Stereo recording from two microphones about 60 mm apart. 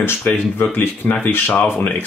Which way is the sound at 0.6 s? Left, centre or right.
Left.